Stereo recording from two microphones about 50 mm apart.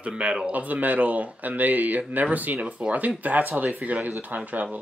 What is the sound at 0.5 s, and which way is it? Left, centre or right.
Speech, right.